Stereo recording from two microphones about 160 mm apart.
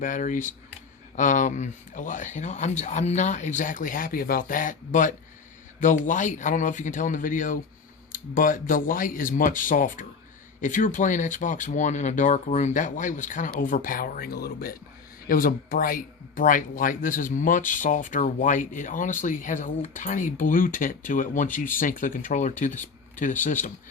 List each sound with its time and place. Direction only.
0.0 s speech: 50° left (ahead or behind); by 14.8 s 70° left (ahead or behind)
15.3 s speech: 60° left (ahead or behind)